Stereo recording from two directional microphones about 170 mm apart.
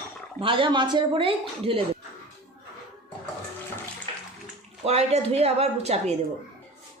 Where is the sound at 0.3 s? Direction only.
30° right (ahead or behind).